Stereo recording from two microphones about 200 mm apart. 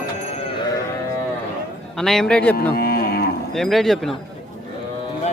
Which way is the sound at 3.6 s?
Centre (ahead or behind).